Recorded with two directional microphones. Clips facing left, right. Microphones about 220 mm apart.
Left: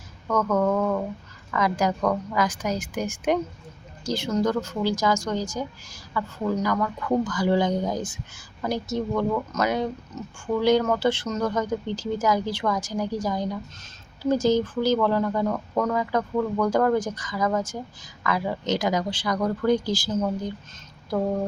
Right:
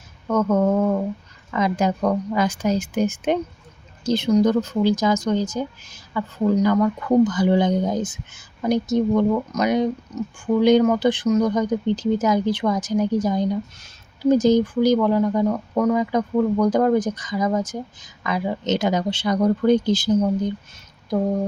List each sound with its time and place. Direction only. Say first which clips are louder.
0.3 s speech: right 4 dB; 25° right (ahead or behind)